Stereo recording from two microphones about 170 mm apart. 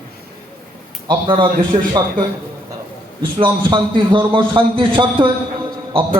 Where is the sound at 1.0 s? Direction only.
25° right (ahead or behind).